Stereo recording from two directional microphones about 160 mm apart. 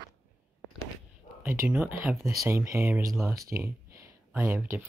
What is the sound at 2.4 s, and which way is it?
Speech, 15° right (ahead or behind).